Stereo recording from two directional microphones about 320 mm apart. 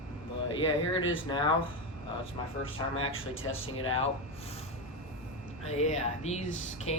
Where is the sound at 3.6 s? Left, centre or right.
Centre.